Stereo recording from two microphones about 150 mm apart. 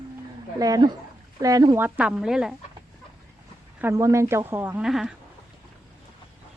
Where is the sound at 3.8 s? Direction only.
15° right (ahead or behind).